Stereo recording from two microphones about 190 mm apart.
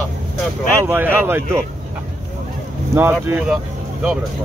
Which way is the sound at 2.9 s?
10° right (ahead or behind).